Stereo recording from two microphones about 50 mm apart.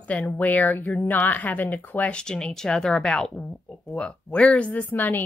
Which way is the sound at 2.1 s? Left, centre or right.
Centre.